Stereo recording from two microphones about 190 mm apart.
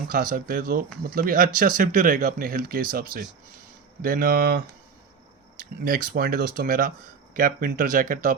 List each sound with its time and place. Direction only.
0.1 s speech: 45° right (ahead or behind)